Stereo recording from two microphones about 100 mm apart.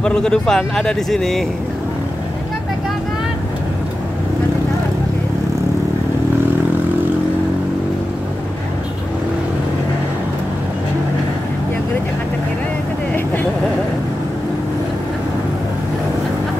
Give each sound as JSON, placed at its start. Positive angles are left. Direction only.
{"t": 0.0, "sound": "a man's voice", "side_deg": 10}
{"t": 13.1, "sound": "vehicle", "side_deg": 20}